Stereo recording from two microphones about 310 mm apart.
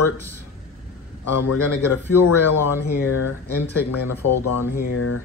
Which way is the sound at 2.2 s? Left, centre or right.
Centre.